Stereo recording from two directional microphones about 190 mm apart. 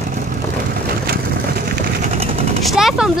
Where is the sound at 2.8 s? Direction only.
Centre (ahead or behind).